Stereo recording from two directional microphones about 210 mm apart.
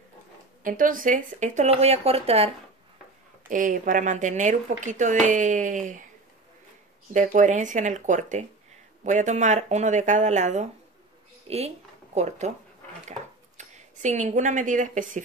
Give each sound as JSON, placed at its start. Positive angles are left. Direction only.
{"t": 0.7, "sound": "speech", "side_deg": -40}
{"t": 3.4, "sound": "speech", "side_deg": -40}
{"t": 7.2, "sound": "speech", "side_deg": -35}
{"t": 13.6, "sound": "a woman's voice", "side_deg": -35}